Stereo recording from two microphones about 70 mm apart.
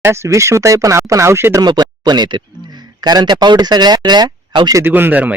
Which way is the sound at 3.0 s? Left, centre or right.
Right.